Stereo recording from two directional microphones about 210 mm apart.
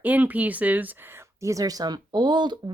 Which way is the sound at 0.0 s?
10° right (ahead or behind).